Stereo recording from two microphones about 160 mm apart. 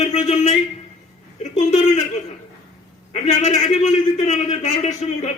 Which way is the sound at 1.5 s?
50° left (ahead or behind).